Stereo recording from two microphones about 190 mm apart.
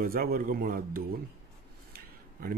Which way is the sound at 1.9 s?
50° right (ahead or behind).